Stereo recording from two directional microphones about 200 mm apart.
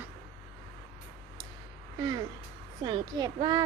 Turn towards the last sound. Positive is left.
turn(degrees=-20)  # may be behind; listen again after turning